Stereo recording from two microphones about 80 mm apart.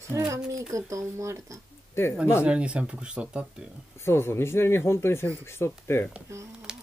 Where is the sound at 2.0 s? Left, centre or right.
Left.